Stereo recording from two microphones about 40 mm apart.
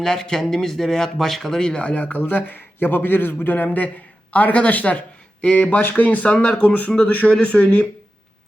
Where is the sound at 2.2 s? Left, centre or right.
Left.